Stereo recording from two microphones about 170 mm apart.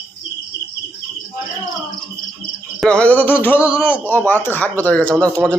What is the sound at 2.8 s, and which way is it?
Speech, 5° left (ahead or behind).